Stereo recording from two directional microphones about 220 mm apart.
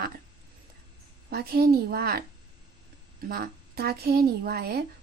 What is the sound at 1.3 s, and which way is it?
A woman's voice, 45° right (ahead or behind).